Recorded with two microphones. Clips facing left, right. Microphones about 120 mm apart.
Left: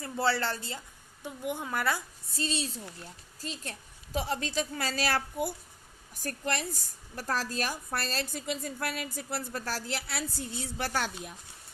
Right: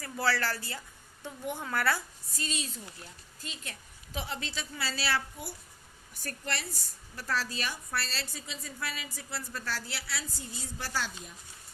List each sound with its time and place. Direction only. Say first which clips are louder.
0.0 s a woman's voice: left 2 dB; 25° left (ahead or behind)
2.3 s a woman's voice: left 4 dB; 30° left (ahead or behind); by 11.3 s 60° left (ahead or behind)